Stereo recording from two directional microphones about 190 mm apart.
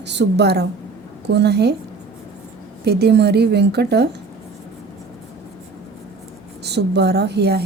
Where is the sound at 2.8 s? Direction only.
60° right (ahead or behind).